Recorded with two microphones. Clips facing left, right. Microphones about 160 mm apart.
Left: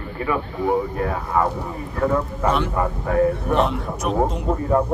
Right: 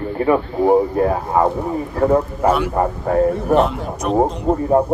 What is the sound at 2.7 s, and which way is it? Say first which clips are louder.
Speech: right 4 dB; 35° right (ahead or behind).